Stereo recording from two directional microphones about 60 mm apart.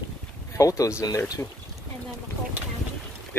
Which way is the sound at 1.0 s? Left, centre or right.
Left.